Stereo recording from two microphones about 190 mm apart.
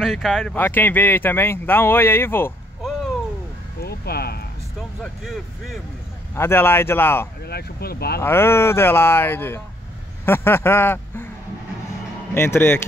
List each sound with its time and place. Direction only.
0.0 s speech: centre (ahead or behind)
0.6 s speech: 10° left (ahead or behind)
3.8 s a sound: 55° left (ahead or behind)
5.0 s speech: centre (ahead or behind)
6.3 s speech: 15° left (ahead or behind)
7.4 s speech: 55° left (ahead or behind)
8.2 s speech: 15° left (ahead or behind)
12.4 s speech: 10° left (ahead or behind)